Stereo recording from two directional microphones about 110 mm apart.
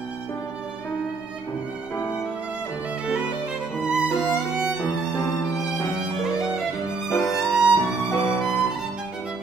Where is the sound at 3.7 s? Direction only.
5° right (ahead or behind).